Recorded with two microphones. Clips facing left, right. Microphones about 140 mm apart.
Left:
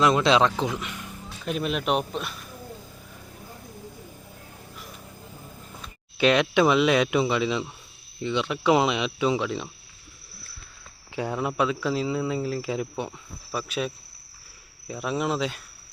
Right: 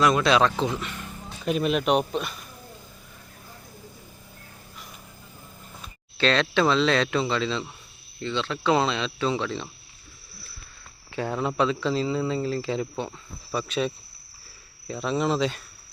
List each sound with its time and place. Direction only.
0.0 s speech: 25° left (ahead or behind)
1.4 s speech: centre (ahead or behind)
6.1 s speech: 15° left (ahead or behind)
11.1 s speech: 15° left (ahead or behind)